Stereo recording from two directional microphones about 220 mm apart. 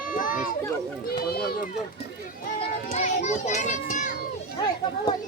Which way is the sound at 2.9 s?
30° left (ahead or behind).